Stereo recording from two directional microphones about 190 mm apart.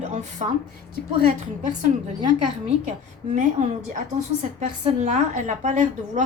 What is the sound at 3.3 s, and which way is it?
Speech, 40° right (ahead or behind).